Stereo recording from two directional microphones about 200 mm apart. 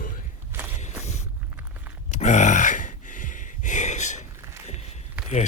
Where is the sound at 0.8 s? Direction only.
35° left (ahead or behind).